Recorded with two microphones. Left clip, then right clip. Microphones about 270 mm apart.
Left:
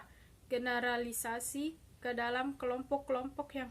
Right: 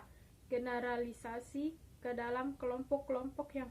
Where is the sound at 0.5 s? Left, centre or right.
Centre.